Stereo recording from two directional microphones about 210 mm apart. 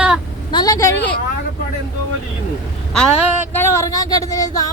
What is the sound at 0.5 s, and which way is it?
Vehicle, 20° left (ahead or behind).